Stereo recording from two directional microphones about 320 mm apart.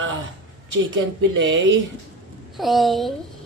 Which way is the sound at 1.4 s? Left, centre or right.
Right.